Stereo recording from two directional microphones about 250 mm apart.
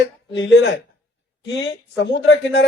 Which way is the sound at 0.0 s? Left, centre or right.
Left.